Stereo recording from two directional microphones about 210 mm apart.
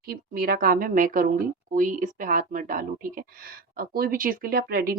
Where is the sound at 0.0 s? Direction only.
45° right (ahead or behind).